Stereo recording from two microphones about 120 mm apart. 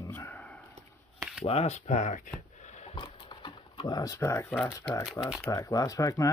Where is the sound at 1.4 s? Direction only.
60° left (ahead or behind); by 2.3 s 90° left.